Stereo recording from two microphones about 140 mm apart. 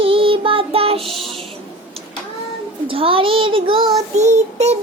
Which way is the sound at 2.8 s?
40° right (ahead or behind).